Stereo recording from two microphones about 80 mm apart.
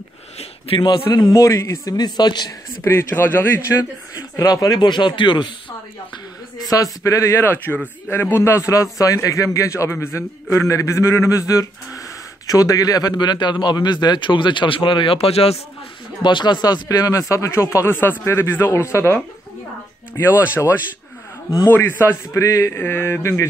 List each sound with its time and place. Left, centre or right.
0.7 s a man's voice: left
1.3 s a man's voice: left
2.0 s speech: left
2.8 s a man's voice: left
4.4 s a man's voice: left
4.8 s speech: left
6.6 s a man's voice: left
7.3 s a man's voice: left
16.2 s speech: left
17.7 s a man's voice: left
20.2 s a man's voice: left
22.7 s a man's voice: left